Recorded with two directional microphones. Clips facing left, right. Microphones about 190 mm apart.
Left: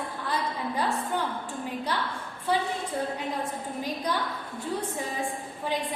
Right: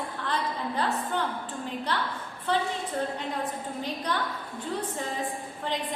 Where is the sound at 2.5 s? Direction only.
10° left (ahead or behind).